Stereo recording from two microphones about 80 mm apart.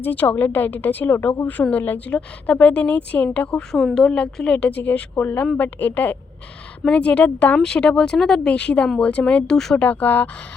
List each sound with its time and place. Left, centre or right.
0.0 s a woman's voice: left
9.8 s a woman's voice: centre